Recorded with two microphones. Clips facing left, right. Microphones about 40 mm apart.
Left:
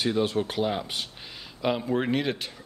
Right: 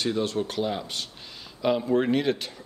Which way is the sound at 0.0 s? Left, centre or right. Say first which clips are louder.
Left 1 dB; centre.